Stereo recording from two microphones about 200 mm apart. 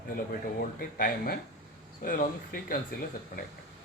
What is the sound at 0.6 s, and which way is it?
Speech, 45° left (ahead or behind).